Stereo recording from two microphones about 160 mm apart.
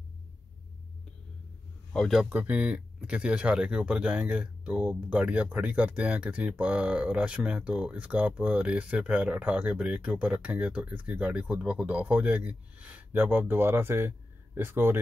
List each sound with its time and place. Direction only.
2.0 s speech: centre (ahead or behind)